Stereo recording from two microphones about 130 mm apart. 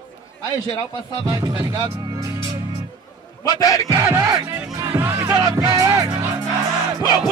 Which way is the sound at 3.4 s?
25° left (ahead or behind).